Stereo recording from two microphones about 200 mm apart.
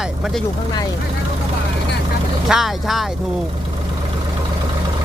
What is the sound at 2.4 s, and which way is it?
Speech, centre (ahead or behind).